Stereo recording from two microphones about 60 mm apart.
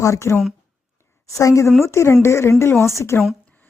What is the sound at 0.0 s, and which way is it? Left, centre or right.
Speech, left.